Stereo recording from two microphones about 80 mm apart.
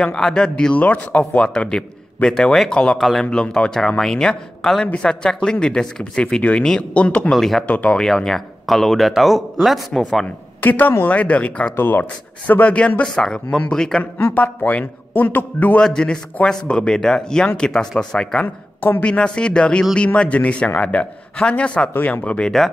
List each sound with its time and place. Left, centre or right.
0.0 s speech: centre
3.3 s speech: centre
7.3 s speech: centre
7.6 s speech: centre
10.6 s speech: left; by 14.0 s centre
14.1 s a man's voice: left
15.8 s speech: centre
18.8 s a woman's voice: left
19.0 s a man's voice: centre